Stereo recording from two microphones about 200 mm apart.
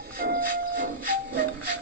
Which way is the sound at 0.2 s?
45° right (ahead or behind).